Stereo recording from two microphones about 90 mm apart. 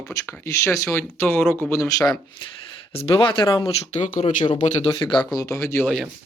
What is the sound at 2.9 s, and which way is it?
Speech, 90° left.